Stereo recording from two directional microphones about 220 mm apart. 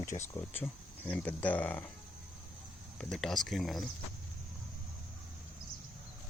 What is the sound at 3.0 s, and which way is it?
Speech, centre (ahead or behind).